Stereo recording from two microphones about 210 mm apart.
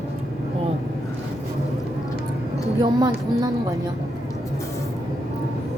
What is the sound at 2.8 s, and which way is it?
Speech, 15° right (ahead or behind).